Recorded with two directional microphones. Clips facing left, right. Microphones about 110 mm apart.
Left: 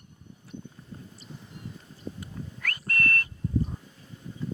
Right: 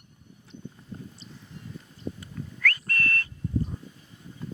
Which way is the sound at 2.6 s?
15° left (ahead or behind).